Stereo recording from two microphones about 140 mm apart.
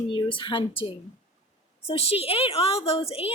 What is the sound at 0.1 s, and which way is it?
Speech, 35° left (ahead or behind).